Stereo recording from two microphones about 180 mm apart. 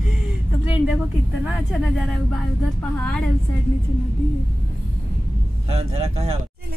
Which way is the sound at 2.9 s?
5° left (ahead or behind).